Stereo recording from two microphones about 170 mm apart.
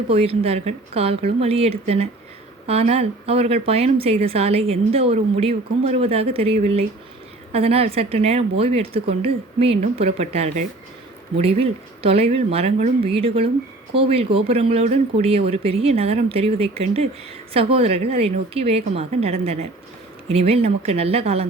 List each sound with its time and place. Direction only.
0.1 s speech: 35° right (ahead or behind)